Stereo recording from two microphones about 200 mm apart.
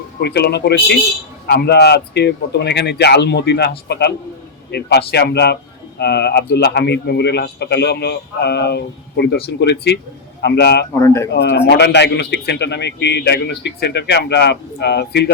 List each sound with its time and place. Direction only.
0.2 s a man's voice: 55° left (ahead or behind)
10.9 s speech: 15° left (ahead or behind)
11.3 s a man's voice: 55° left (ahead or behind)